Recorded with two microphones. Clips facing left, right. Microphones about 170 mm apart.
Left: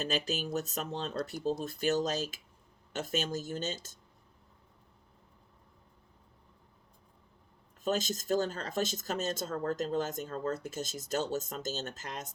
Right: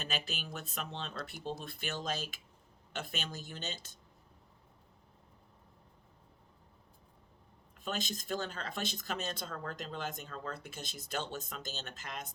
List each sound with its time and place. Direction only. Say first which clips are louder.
0.0 s speech: left 7 dB; 45° left (ahead or behind)
7.9 s speech: left 7 dB; 45° left (ahead or behind)